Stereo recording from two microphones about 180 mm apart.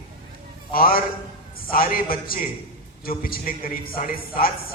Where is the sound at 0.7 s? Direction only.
55° left (ahead or behind).